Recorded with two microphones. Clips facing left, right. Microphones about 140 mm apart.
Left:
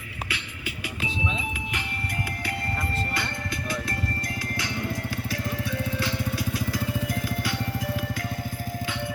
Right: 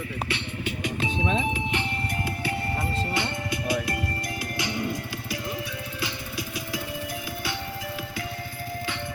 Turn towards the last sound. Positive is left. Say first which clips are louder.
# left 3 dB
turn(degrees=-5)  # may be behind; listen again after turning